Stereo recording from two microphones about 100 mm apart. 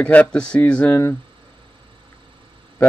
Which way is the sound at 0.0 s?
15° left (ahead or behind).